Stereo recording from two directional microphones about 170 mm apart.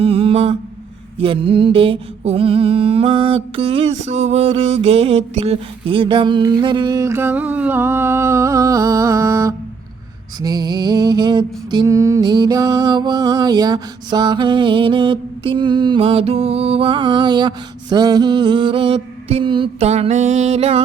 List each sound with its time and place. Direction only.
0.0 s mantra: 30° right (ahead or behind)
5.3 s music: 35° right (ahead or behind)